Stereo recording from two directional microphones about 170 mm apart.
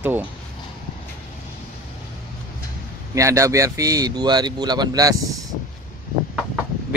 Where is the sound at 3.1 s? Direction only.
15° right (ahead or behind).